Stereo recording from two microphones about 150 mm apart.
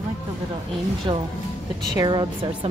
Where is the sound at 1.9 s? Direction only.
30° right (ahead or behind).